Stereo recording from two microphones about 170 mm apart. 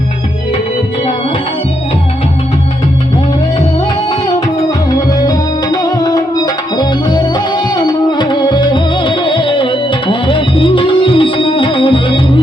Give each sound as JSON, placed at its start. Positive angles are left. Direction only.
{"t": 4.9, "sound": "music", "side_deg": 20}